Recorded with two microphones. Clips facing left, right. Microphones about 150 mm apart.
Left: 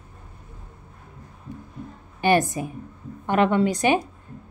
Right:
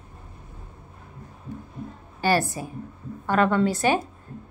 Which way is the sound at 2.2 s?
20° left (ahead or behind).